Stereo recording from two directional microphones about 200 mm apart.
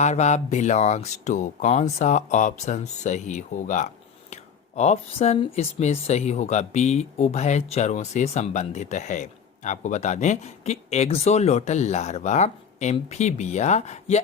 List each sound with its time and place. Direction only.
0.0 s speech: 35° left (ahead or behind)